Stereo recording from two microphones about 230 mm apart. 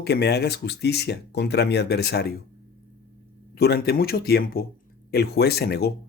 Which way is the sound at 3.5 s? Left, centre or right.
Left.